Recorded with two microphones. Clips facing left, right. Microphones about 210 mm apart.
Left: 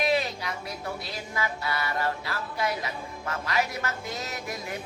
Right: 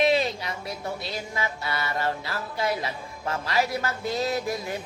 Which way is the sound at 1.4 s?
25° right (ahead or behind).